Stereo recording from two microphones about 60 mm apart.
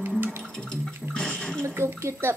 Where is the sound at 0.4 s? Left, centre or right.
Centre.